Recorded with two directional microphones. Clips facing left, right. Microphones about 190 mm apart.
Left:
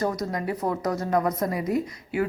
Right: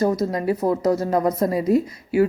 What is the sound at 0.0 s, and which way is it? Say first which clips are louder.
A woman's voice: right 6 dB; 25° right (ahead or behind).